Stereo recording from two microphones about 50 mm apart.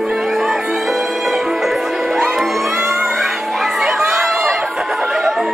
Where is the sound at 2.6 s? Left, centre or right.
Centre.